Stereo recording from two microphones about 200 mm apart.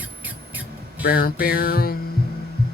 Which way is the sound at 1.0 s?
50° left (ahead or behind).